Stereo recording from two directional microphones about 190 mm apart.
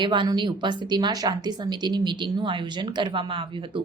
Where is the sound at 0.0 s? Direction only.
25° right (ahead or behind).